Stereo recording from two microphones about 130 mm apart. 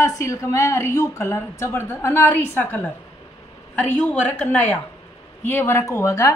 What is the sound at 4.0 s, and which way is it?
A woman's voice, 10° left (ahead or behind).